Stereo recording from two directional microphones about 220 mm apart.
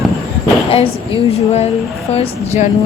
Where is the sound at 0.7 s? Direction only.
25° left (ahead or behind).